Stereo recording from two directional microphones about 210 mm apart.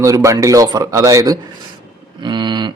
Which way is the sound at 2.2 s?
20° right (ahead or behind).